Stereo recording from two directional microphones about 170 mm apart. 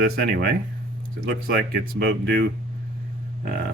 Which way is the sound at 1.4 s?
60° right (ahead or behind).